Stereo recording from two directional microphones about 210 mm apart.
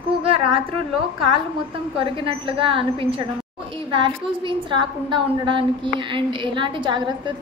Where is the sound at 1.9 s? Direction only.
25° right (ahead or behind).